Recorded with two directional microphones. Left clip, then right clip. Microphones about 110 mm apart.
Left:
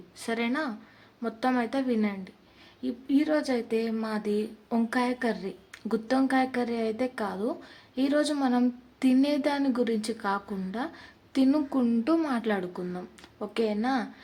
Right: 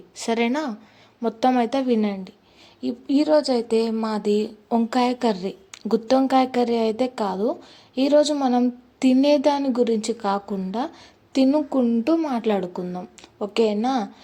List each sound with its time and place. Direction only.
0.2 s a woman's voice: 60° right (ahead or behind); by 12.4 s 30° right (ahead or behind)
12.4 s a woman's voice: 40° right (ahead or behind)